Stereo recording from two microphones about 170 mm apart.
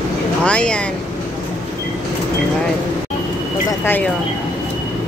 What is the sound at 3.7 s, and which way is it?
Speech, 10° left (ahead or behind).